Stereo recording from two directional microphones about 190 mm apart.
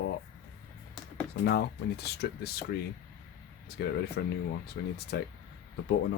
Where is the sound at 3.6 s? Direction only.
60° left (ahead or behind).